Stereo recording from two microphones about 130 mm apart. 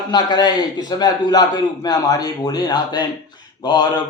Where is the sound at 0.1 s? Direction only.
35° left (ahead or behind).